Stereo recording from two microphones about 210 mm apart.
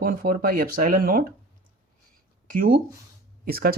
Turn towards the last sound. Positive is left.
turn(degrees=-45)  # may be behind; listen again after turning